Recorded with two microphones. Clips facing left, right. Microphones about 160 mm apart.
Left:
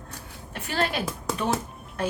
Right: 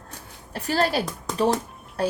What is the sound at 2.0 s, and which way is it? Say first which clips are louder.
Music: right 4 dB; 35° right (ahead or behind).